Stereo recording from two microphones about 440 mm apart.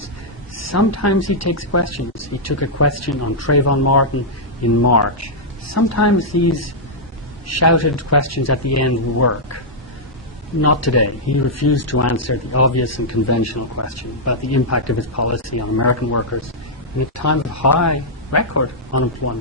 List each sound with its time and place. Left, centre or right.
0.6 s speech: left
10.6 s speech: left